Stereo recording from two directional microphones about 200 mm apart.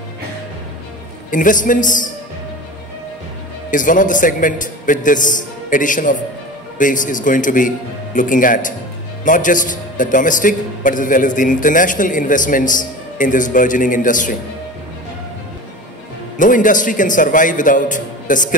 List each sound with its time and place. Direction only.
1.3 s a man's voice: 40° left (ahead or behind)
3.7 s a man's voice: 40° left (ahead or behind)
16.3 s a man's voice: 40° left (ahead or behind)